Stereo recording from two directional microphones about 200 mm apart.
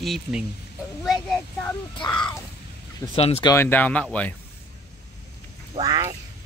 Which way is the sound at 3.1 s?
30° left (ahead or behind).